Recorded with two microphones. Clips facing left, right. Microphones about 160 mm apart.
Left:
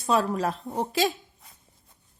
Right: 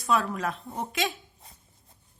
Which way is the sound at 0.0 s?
40° left (ahead or behind).